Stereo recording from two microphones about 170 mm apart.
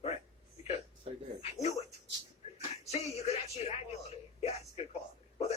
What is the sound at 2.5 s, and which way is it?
Speech, 40° left (ahead or behind).